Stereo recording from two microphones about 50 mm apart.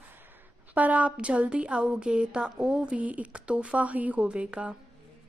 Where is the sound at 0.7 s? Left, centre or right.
Right.